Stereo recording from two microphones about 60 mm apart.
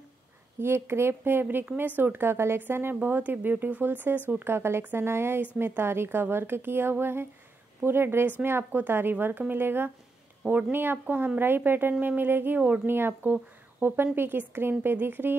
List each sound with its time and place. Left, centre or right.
0.6 s a woman's voice: right